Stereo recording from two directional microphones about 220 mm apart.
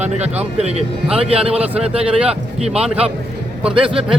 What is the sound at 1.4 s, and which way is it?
Speech, 25° right (ahead or behind).